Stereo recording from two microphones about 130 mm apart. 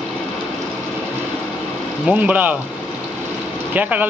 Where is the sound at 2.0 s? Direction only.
10° right (ahead or behind).